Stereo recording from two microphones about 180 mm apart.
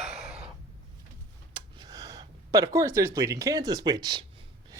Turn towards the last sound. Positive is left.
turn(degrees=-20)  # may be behind; listen again after turning